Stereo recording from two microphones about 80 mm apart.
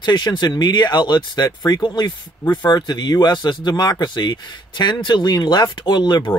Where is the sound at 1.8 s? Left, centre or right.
Left.